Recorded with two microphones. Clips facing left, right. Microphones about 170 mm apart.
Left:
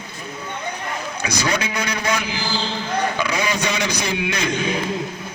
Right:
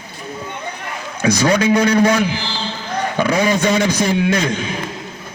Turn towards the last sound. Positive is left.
turn(degrees=-50)  # may be behind; listen again after turning